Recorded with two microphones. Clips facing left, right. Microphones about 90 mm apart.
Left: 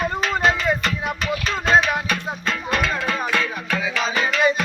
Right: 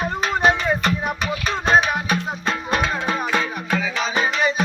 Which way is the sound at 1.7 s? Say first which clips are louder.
Even; 15° right (ahead or behind).